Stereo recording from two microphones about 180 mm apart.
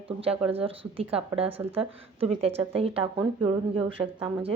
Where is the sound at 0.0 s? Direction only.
30° right (ahead or behind).